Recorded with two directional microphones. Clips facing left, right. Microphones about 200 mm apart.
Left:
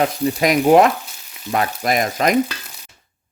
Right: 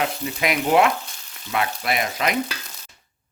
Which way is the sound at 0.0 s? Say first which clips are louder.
Left 7 dB; 40° left (ahead or behind).